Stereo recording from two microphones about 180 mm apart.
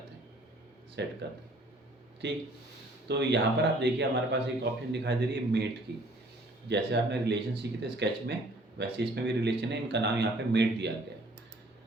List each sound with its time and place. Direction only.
1.0 s speech: 70° right (ahead or behind)
2.2 s speech: 75° right (ahead or behind)